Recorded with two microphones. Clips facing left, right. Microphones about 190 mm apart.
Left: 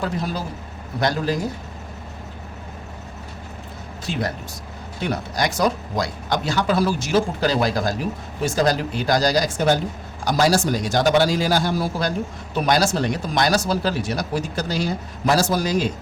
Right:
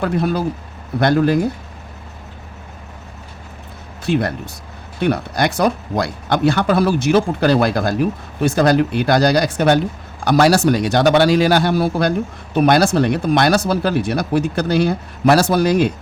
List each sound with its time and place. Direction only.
0.0 s speech: 60° right (ahead or behind)
4.0 s speech: 60° right (ahead or behind)